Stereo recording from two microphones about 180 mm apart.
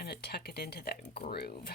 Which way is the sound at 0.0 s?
65° left (ahead or behind).